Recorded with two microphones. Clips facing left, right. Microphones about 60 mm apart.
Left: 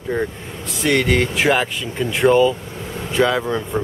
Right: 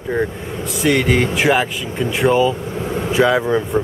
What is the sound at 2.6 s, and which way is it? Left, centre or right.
Speech, right.